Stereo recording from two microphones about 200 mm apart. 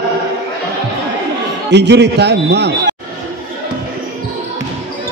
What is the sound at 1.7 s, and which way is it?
A man's voice, 60° right (ahead or behind).